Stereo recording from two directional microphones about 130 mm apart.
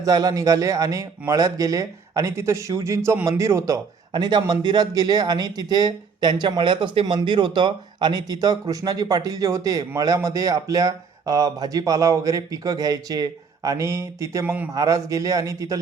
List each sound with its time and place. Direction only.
0.0 s a man's voice: 30° right (ahead or behind)
4.1 s a man's voice: 35° right (ahead or behind); by 14.7 s 15° right (ahead or behind)
14.7 s a man's voice: 25° right (ahead or behind)